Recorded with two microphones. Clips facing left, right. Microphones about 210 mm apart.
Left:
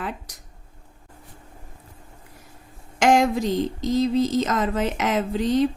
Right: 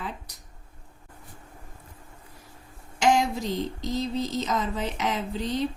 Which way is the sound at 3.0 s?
90° left.